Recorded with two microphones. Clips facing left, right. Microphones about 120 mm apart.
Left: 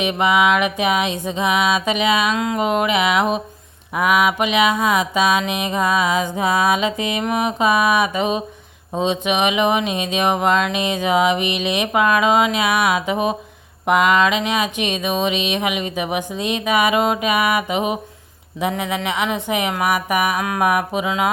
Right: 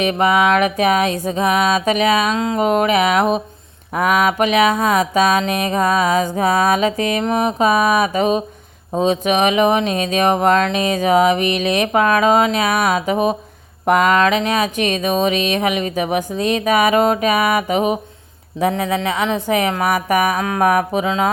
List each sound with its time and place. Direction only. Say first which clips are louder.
0.0 s mantra: right 2 dB; 40° right (ahead or behind)
2.6 s mantra: right 4 dB; 40° right (ahead or behind)
9.0 s a sound: right 3 dB; 40° right (ahead or behind)